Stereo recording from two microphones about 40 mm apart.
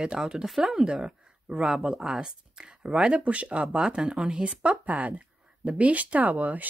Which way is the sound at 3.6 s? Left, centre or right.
Centre.